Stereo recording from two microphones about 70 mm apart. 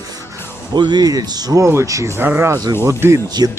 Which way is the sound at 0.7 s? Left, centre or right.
Right.